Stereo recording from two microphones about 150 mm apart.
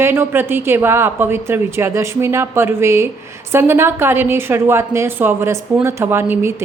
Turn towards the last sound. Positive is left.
turn(degrees=-15)  # may be behind; listen again after turning